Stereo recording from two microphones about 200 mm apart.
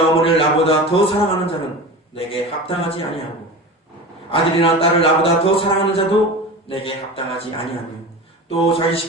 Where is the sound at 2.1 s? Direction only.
25° left (ahead or behind).